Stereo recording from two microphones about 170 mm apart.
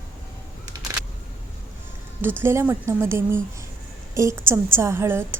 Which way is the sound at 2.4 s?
15° right (ahead or behind).